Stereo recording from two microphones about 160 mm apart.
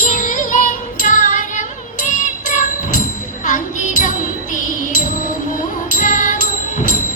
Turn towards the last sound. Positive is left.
turn(degrees=50)  # may be behind; listen again after turning